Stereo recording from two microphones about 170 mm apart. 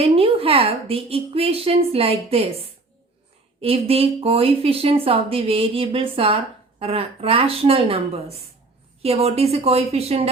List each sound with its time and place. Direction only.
0.0 s speech: 35° right (ahead or behind)
3.6 s speech: 35° right (ahead or behind)